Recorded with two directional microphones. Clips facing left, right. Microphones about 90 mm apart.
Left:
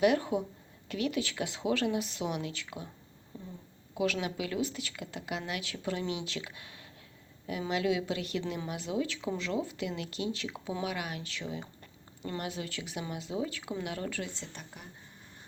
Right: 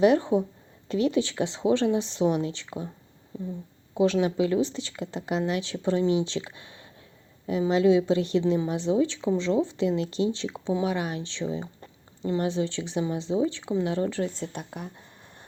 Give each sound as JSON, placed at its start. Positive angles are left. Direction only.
{"t": 0.0, "sound": "a woman's voice", "side_deg": -30}
{"t": 3.9, "sound": "a woman's voice", "side_deg": -25}
{"t": 14.3, "sound": "a woman's voice", "side_deg": -55}